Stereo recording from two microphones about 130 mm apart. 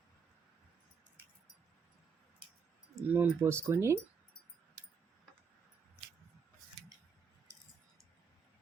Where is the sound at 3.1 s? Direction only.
15° right (ahead or behind).